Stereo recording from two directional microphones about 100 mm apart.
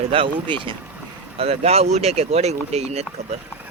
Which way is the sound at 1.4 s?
90° right.